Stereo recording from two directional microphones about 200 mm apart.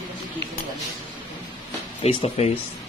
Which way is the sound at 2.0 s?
30° left (ahead or behind).